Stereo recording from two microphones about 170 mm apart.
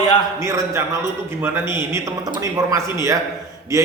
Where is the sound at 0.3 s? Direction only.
15° right (ahead or behind).